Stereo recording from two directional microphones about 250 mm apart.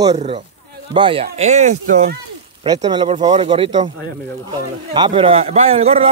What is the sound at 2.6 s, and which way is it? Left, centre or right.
A man's voice, centre.